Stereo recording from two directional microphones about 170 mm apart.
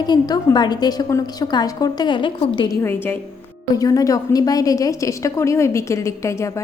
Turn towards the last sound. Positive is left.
turn(degrees=15)  # may be behind; listen again after turning